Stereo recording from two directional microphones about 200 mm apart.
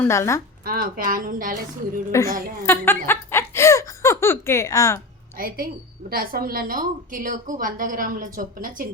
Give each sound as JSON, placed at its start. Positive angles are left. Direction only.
{"t": 0.0, "sound": "speech", "side_deg": 15}
{"t": 0.6, "sound": "a woman's voice", "side_deg": -45}
{"t": 2.1, "sound": "speech", "side_deg": 15}
{"t": 5.4, "sound": "a woman's voice", "side_deg": -45}